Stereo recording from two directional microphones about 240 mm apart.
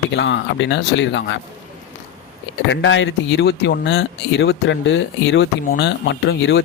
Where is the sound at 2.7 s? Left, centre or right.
Left.